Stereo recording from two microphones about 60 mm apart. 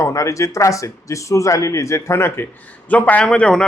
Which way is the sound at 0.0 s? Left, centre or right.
Left.